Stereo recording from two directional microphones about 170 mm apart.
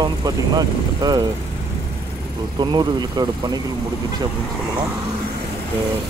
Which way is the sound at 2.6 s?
25° right (ahead or behind).